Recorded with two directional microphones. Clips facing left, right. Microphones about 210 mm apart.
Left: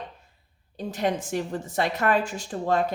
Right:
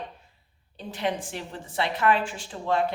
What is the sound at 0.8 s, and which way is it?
A woman's voice, 45° left (ahead or behind).